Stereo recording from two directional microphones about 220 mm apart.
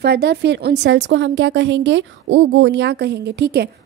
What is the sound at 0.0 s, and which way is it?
A woman's voice, 50° right (ahead or behind).